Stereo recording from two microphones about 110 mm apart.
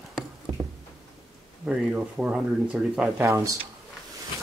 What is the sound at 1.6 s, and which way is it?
Speech, 10° right (ahead or behind).